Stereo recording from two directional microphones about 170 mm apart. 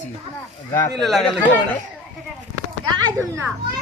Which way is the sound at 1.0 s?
Centre (ahead or behind).